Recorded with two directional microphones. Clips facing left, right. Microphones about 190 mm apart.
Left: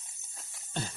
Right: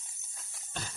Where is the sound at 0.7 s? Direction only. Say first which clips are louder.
Left 5 dB; 25° left (ahead or behind).